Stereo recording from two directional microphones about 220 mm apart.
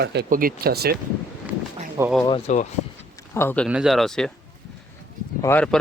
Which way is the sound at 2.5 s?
30° left (ahead or behind).